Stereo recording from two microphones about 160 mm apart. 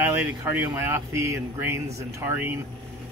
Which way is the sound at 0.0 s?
10° right (ahead or behind).